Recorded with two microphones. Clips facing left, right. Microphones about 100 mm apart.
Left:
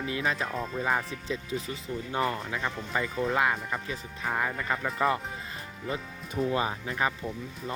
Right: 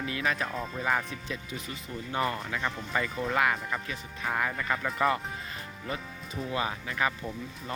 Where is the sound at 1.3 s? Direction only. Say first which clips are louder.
Left 5 dB; 30° left (ahead or behind).